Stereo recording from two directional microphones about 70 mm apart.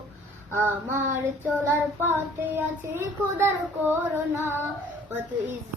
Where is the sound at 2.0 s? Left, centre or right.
Right.